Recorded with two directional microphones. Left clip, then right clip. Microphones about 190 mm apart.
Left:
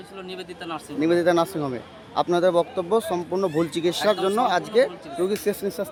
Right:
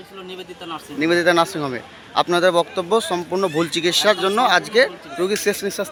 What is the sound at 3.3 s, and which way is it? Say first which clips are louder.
Speech: right 4 dB; 10° right (ahead or behind).